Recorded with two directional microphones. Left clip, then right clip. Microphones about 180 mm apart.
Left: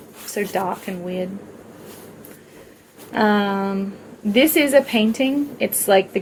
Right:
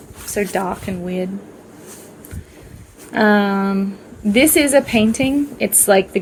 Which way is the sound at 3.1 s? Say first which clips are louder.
Right 3 dB; 45° right (ahead or behind).